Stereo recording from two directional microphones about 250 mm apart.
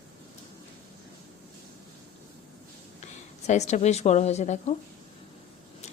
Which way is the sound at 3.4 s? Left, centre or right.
Left.